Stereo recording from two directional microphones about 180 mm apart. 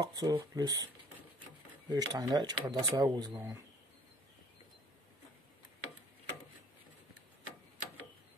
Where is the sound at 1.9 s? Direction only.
20° right (ahead or behind).